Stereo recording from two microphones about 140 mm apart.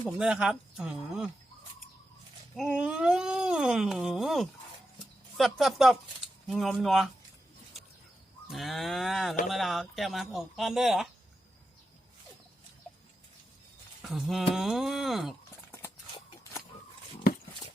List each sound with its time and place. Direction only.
0.2 s speech: 5° right (ahead or behind)
2.6 s speech: 5° right (ahead or behind)
8.4 s speech: centre (ahead or behind)
14.0 s a sound: centre (ahead or behind)
14.5 s speech: centre (ahead or behind)
16.4 s a sound: 20° left (ahead or behind)